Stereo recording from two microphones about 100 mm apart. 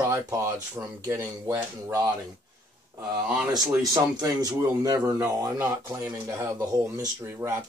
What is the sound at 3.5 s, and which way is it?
Speech, 40° right (ahead or behind).